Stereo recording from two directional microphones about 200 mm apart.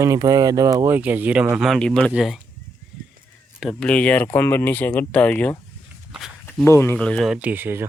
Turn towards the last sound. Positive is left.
turn(degrees=-10)  # may be behind; listen again after turning